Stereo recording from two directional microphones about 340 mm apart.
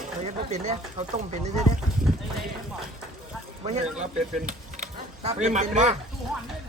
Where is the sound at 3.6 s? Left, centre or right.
Centre.